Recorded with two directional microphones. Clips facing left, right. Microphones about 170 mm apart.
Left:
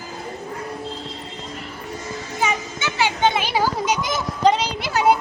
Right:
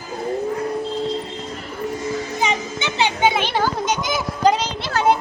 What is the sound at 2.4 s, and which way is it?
Children playing, 20° right (ahead or behind).